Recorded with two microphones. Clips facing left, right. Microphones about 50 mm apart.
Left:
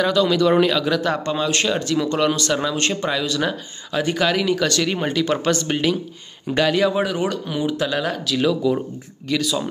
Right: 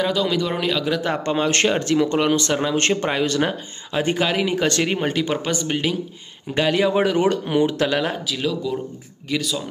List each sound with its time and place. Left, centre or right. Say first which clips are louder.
0.0 s speech: left 4 dB; centre
1.0 s speech: even; right
5.3 s speech: left 3 dB; centre
6.7 s speech: right 1 dB; right
8.4 s speech: left 8 dB; centre